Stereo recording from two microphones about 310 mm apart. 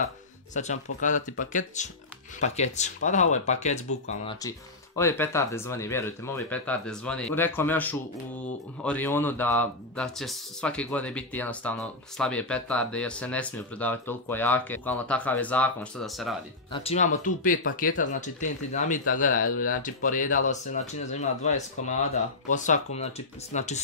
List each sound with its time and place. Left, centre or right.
0.5 s speech: left
4.4 s speech: centre
16.7 s speech: centre